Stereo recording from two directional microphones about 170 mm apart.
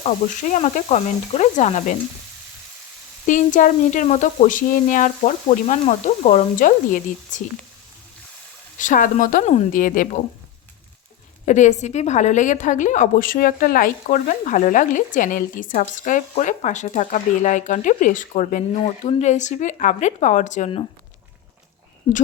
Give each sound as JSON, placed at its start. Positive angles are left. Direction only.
{"t": 0.0, "sound": "a woman's voice", "side_deg": 45}
{"t": 3.2, "sound": "a woman's voice", "side_deg": 50}
{"t": 8.8, "sound": "a woman's voice", "side_deg": 50}
{"t": 11.4, "sound": "a woman's voice", "side_deg": 45}